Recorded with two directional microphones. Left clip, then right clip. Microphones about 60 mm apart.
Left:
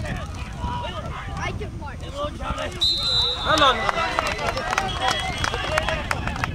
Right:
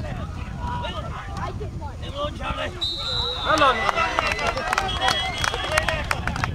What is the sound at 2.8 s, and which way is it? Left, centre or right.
Basketball bounce, centre.